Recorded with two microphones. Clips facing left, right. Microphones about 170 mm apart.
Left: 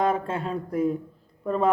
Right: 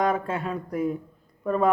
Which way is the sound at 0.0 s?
30° left (ahead or behind).